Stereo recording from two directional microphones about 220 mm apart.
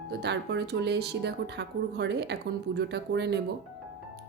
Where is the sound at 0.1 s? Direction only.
50° right (ahead or behind).